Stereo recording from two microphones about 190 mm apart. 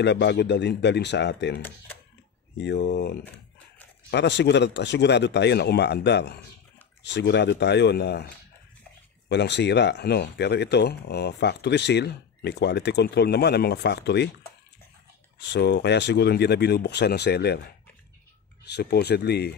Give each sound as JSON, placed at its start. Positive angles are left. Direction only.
{"t": 0.0, "sound": "speech", "side_deg": 65}
{"t": 9.3, "sound": "speech", "side_deg": 65}
{"t": 15.3, "sound": "speech", "side_deg": 65}
{"t": 18.7, "sound": "speech", "side_deg": 60}